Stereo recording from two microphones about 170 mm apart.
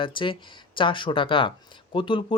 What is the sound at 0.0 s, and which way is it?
Speech, 30° left (ahead or behind).